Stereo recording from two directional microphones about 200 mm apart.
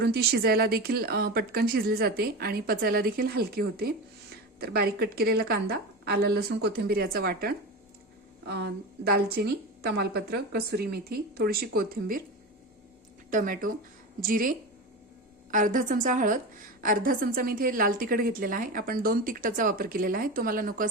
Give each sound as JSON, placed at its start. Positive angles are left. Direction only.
{"t": 0.0, "sound": "a woman's voice", "side_deg": -55}
{"t": 13.3, "sound": "a woman's voice", "side_deg": -40}